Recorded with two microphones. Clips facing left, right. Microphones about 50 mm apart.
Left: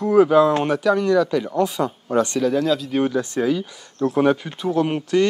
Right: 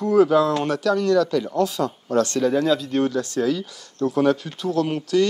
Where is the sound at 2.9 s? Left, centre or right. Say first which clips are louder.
Left 1 dB; centre.